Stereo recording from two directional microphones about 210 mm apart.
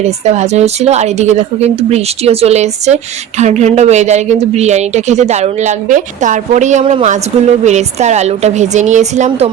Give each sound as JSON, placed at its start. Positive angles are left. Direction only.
{"t": 0.3, "sound": "speech", "side_deg": -30}